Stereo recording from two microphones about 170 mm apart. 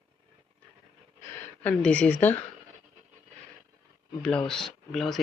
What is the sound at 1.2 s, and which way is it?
Speech, 5° left (ahead or behind).